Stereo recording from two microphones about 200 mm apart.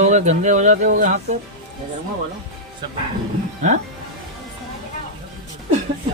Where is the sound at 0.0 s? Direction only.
35° right (ahead or behind).